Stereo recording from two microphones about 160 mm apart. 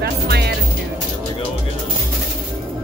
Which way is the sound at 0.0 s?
90° right.